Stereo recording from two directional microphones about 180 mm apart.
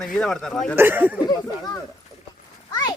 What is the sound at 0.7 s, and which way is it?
Speech, 10° right (ahead or behind).